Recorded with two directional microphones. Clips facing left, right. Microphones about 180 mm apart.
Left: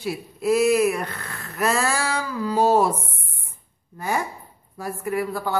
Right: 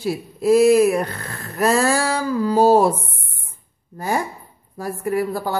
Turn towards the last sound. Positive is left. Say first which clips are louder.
# right 3 dB
turn(degrees=-35)  # may be behind; listen again after turning